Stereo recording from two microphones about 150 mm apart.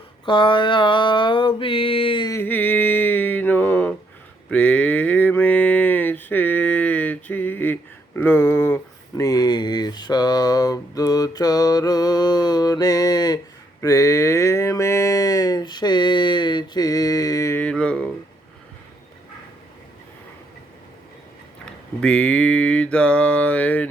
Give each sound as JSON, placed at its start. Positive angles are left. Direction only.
{"t": 0.3, "sound": "mantra", "side_deg": 35}
{"t": 2.3, "sound": "music", "side_deg": 15}
{"t": 4.4, "sound": "mantra", "side_deg": 10}
{"t": 13.8, "sound": "a sound", "side_deg": 20}
{"t": 17.6, "sound": "a sound", "side_deg": 5}
{"t": 22.0, "sound": "mantra", "side_deg": 10}